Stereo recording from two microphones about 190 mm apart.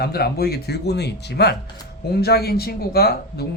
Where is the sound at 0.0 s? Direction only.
55° left (ahead or behind).